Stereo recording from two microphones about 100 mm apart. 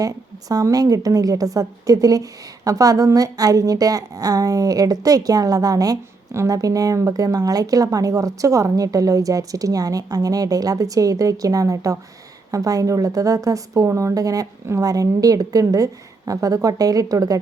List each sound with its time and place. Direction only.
0.0 s a woman's voice: 35° right (ahead or behind)